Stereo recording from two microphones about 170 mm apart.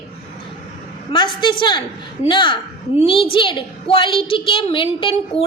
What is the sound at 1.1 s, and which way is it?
A woman's voice, 30° left (ahead or behind).